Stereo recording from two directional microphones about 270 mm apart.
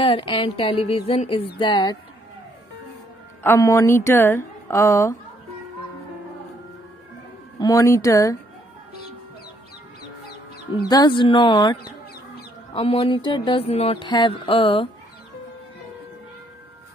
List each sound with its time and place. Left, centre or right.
0.0 s a sound: centre
1.6 s a woman's voice: centre
3.4 s a woman's voice: centre
7.5 s a woman's voice: centre
10.9 s a woman's voice: centre
12.7 s a sound: centre